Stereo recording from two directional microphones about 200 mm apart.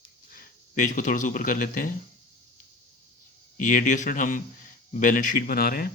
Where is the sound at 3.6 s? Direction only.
40° left (ahead or behind).